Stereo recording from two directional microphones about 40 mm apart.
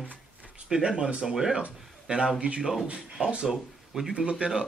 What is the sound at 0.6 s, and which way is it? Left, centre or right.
A man's voice, centre.